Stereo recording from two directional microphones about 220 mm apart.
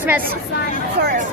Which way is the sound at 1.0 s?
40° right (ahead or behind).